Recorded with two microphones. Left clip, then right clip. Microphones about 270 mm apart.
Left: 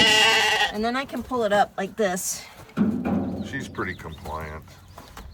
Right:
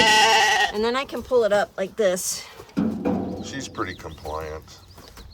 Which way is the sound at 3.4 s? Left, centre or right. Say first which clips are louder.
Even; centre.